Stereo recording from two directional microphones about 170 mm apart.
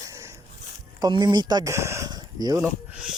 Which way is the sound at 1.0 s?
25° right (ahead or behind).